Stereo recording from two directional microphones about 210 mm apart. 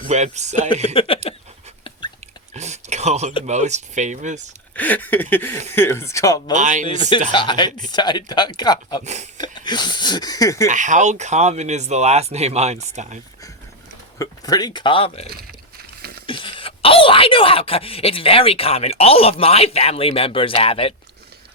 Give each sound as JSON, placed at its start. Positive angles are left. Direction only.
{"t": 0.1, "sound": "speech", "side_deg": -35}
{"t": 0.9, "sound": "speech", "side_deg": 25}
{"t": 2.5, "sound": "a sound", "side_deg": -30}
{"t": 3.4, "sound": "speech", "side_deg": -35}
{"t": 4.7, "sound": "a sound", "side_deg": 10}
{"t": 6.5, "sound": "speech", "side_deg": -35}
{"t": 7.3, "sound": "speech", "side_deg": 20}
{"t": 10.7, "sound": "speech", "side_deg": -35}
{"t": 14.2, "sound": "speech", "side_deg": 20}